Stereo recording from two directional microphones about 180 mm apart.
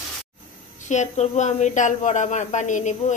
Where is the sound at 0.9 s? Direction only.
40° left (ahead or behind).